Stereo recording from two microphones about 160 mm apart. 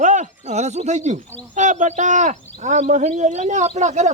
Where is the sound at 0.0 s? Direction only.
50° right (ahead or behind).